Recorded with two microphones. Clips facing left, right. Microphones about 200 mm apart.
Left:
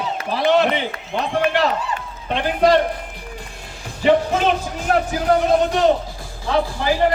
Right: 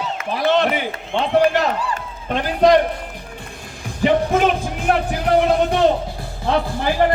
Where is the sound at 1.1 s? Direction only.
35° right (ahead or behind).